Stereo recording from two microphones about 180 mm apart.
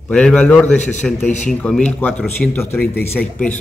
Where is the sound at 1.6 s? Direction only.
5° left (ahead or behind).